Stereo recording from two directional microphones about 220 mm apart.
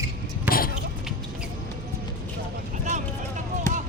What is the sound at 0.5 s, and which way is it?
Basketball bounce, 10° right (ahead or behind).